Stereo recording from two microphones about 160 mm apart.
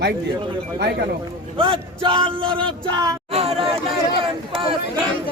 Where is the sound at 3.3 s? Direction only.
40° right (ahead or behind).